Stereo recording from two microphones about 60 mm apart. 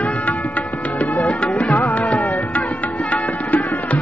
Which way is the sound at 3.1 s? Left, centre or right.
Left.